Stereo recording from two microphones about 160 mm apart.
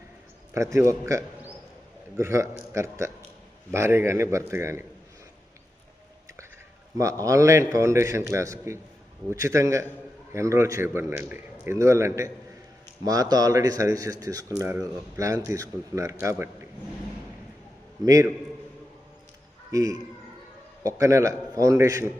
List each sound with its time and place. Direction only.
0.5 s a man's voice: 20° right (ahead or behind)
6.9 s a man's voice: 20° right (ahead or behind)
18.0 s speech: 20° right (ahead or behind)
19.7 s speech: 20° right (ahead or behind)